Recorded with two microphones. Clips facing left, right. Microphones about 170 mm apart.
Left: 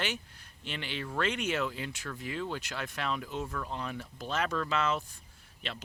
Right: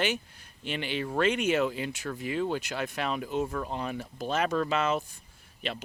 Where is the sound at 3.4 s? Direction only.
25° right (ahead or behind).